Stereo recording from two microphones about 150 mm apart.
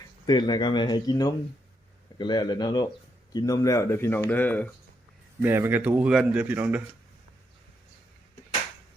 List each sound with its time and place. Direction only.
0.0 s speech: 30° left (ahead or behind); by 4.7 s 10° left (ahead or behind)
5.4 s speech: 15° right (ahead or behind)